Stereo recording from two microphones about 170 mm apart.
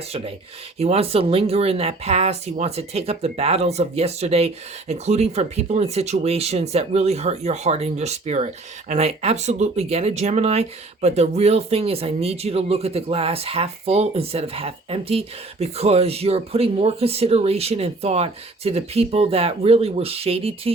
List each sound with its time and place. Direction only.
0.8 s speech: 35° right (ahead or behind)